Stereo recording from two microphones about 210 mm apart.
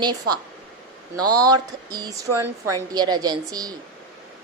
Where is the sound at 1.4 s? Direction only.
20° right (ahead or behind).